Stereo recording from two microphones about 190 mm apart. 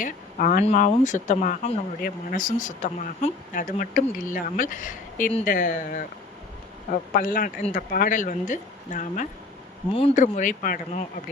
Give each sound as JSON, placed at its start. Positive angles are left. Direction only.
{"t": 0.0, "sound": "speech", "side_deg": 45}